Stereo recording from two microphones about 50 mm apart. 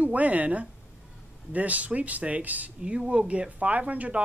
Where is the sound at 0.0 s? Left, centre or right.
Right.